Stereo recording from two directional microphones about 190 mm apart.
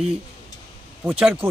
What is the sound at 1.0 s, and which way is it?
Speech, 5° right (ahead or behind).